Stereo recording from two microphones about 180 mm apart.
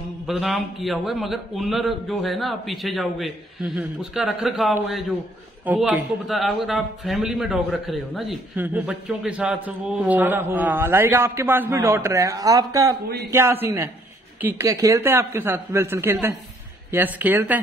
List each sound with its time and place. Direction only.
0.3 s a man's voice: centre (ahead or behind)